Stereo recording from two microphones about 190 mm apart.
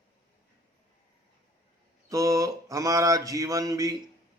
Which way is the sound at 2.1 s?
15° right (ahead or behind).